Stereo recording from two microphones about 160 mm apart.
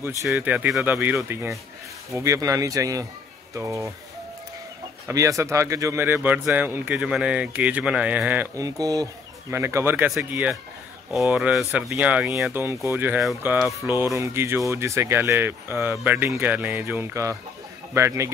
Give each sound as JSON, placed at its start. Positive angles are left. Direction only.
{"t": 0.3, "sound": "speech", "side_deg": -10}
{"t": 2.1, "sound": "speech", "side_deg": -20}
{"t": 5.0, "sound": "speech", "side_deg": -20}
{"t": 8.5, "sound": "speech", "side_deg": -20}